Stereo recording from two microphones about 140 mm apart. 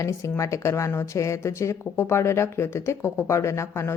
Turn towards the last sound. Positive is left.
turn(degrees=20)  # may be behind; listen again after turning